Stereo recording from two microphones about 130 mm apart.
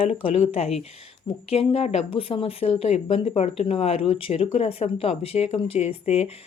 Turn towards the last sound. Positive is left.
turn(degrees=55)  # may be behind; listen again after turning